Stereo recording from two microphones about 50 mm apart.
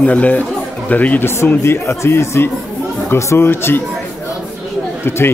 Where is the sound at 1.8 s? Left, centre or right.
Left.